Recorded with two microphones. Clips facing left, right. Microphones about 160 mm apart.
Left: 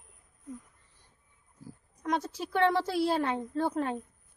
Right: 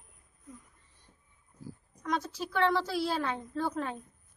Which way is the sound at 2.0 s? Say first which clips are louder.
Left 2 dB; 20° left (ahead or behind).